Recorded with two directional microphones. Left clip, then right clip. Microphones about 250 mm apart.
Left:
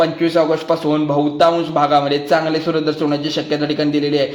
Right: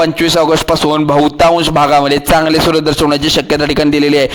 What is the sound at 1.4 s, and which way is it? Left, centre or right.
A man's voice, right.